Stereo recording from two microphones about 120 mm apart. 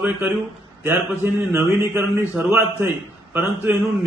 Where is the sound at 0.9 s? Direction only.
20° right (ahead or behind).